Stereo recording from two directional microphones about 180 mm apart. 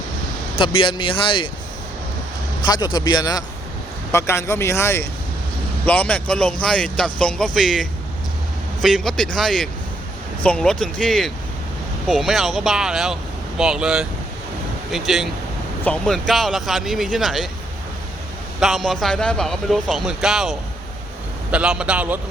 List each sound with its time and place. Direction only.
0.6 s speech: 30° left (ahead or behind)
2.6 s speech: 25° left (ahead or behind); by 17.5 s centre (ahead or behind)
18.6 s a man's voice: centre (ahead or behind)